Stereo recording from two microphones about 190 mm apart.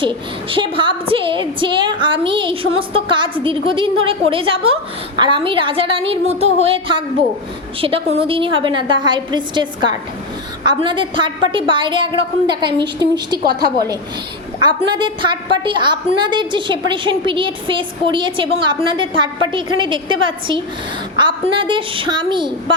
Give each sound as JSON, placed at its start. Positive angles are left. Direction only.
{"t": 0.0, "sound": "a woman's voice", "side_deg": -25}
{"t": 14.8, "sound": "a woman's voice", "side_deg": -25}